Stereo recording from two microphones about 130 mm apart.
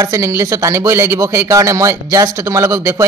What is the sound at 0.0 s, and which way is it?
Speech, 25° right (ahead or behind).